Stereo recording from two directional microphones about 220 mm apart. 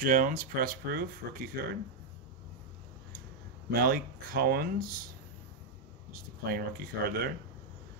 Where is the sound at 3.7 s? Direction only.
40° right (ahead or behind).